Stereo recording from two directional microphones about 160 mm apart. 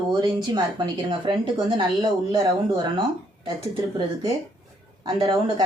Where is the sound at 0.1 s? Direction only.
25° right (ahead or behind).